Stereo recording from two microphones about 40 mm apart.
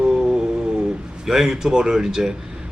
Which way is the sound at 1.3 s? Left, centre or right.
Centre.